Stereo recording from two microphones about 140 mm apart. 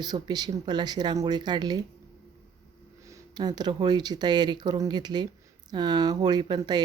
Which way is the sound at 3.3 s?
30° right (ahead or behind).